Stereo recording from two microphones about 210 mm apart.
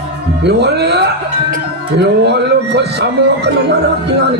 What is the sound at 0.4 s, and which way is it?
A man's voice, 50° right (ahead or behind).